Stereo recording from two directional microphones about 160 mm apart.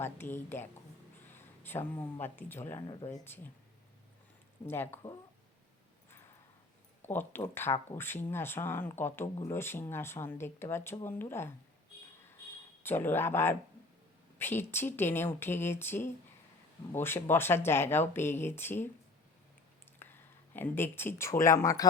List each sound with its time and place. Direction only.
0.0 s speech: 15° left (ahead or behind)
1.3 s a sound: 15° left (ahead or behind)
2.2 s speech: 15° left (ahead or behind)
2.8 s speech: 30° left (ahead or behind)
3.2 s speech: 15° left (ahead or behind)
4.6 s speech: 15° left (ahead or behind)
7.1 s speech: 15° left (ahead or behind)
12.8 s speech: 15° left (ahead or behind)
20.0 s speech: 10° left (ahead or behind)